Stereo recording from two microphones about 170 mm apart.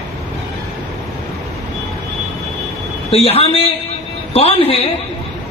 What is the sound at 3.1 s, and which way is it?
A man's voice, 35° left (ahead or behind).